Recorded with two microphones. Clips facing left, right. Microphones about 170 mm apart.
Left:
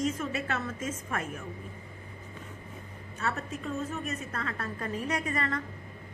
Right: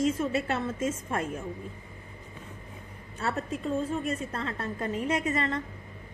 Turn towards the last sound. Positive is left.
turn(degrees=-25)  # may be behind; listen again after turning